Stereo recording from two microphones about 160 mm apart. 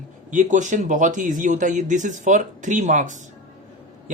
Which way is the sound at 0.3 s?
50° right (ahead or behind).